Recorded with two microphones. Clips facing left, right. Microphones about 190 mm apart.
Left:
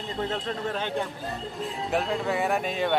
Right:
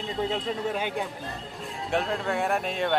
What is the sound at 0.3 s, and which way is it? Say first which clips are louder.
Speech: right 1 dB; 10° right (ahead or behind).